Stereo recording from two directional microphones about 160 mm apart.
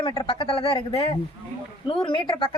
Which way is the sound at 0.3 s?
35° left (ahead or behind).